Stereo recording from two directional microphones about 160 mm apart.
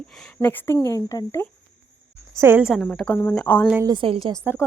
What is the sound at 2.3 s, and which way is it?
Speech, 15° right (ahead or behind).